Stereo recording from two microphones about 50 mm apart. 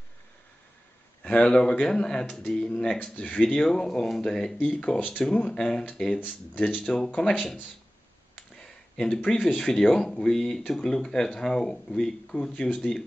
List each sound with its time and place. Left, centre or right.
1.2 s speech: left
1.5 s speech: centre
3.4 s speech: centre
6.1 s speech: left
7.2 s speech: centre
8.5 s speech: centre